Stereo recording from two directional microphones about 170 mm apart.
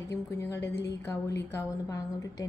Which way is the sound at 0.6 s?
85° left.